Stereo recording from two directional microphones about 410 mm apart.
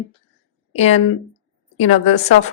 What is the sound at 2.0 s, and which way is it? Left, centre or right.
Speech, centre.